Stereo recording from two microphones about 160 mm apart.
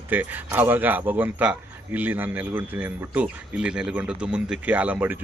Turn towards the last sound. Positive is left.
turn(degrees=-10)  # may be behind; listen again after turning